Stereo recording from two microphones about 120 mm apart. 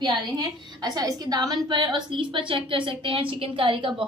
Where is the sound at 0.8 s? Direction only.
35° right (ahead or behind).